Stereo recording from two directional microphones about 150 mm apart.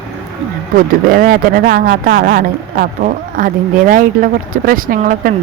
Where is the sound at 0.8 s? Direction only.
70° right (ahead or behind).